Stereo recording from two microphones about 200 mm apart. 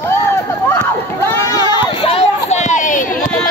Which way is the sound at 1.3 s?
15° left (ahead or behind).